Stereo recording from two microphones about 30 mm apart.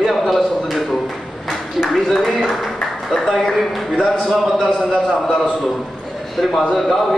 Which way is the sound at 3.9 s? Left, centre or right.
Centre.